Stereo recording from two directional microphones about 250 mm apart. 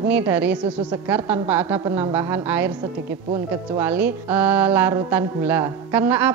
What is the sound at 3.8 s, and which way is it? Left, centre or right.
A woman's voice, centre.